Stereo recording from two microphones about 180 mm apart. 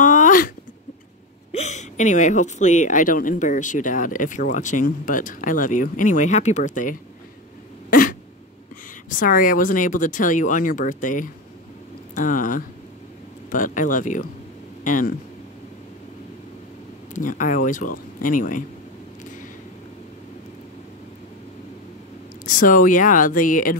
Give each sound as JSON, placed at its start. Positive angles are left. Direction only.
{"t": 0.0, "sound": "a sound", "side_deg": 45}
{"t": 1.5, "sound": "speech", "side_deg": 40}
{"t": 7.9, "sound": "throat clearing", "side_deg": 50}
{"t": 9.1, "sound": "speech", "side_deg": 50}
{"t": 17.1, "sound": "speech", "side_deg": 45}
{"t": 22.6, "sound": "speech", "side_deg": 50}